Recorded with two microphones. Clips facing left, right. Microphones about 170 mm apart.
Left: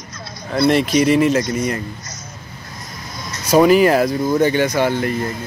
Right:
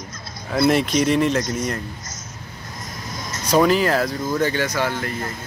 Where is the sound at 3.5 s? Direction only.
10° left (ahead or behind).